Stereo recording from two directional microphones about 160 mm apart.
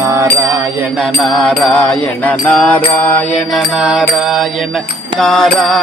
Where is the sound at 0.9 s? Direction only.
Centre (ahead or behind).